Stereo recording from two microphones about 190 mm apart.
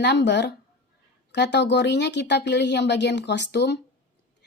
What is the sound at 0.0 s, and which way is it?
Speech, 65° left (ahead or behind).